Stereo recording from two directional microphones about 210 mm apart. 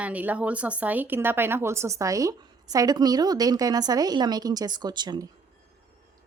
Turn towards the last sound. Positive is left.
turn(degrees=-20)  # may be behind; listen again after turning